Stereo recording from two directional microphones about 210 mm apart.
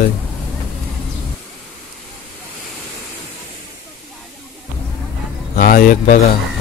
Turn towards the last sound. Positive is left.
turn(degrees=45)  # may be behind; listen again after turning